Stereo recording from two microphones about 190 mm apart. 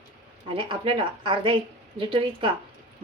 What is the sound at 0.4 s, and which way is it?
A woman's voice, 30° right (ahead or behind).